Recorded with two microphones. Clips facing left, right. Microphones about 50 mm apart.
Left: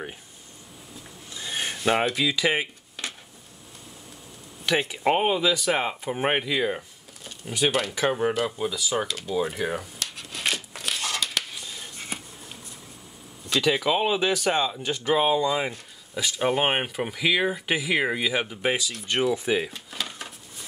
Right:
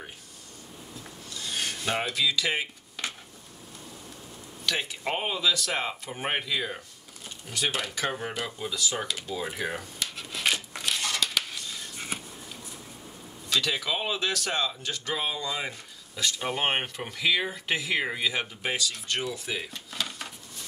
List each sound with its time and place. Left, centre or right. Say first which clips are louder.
1.3 s rub: left 2 dB; left
4.6 s speech: left 7 dB; left; by 9.3 s centre
9.4 s a sound: left 7 dB; centre
11.0 s scissors: left 1 dB; centre
13.5 s speech: left 5 dB; centre
19.7 s drawer open or close: left 1 dB; centre